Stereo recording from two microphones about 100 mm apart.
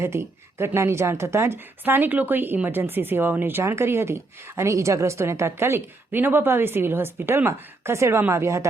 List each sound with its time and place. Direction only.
0.0 s a woman's voice: 25° right (ahead or behind)